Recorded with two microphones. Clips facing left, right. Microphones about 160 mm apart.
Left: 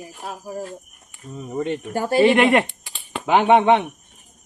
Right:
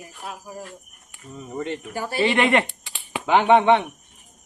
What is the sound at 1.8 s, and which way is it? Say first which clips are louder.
Speech: left 8 dB; 50° left (ahead or behind).